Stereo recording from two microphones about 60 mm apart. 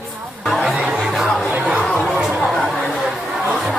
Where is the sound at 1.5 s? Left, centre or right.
Right.